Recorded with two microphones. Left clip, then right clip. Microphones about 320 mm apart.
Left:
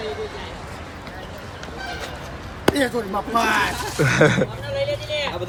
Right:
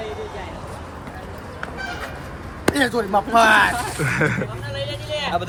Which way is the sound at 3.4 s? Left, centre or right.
Centre.